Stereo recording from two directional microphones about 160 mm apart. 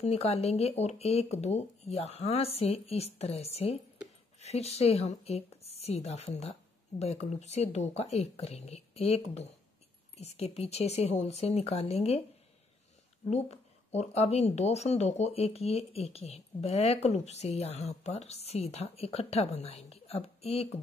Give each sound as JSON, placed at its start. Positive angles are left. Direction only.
{"t": 0.0, "sound": "speech", "side_deg": 40}
{"t": 13.3, "sound": "speech", "side_deg": 45}